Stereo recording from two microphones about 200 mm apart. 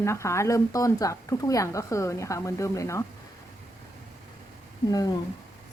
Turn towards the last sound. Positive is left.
turn(degrees=20)  # may be behind; listen again after turning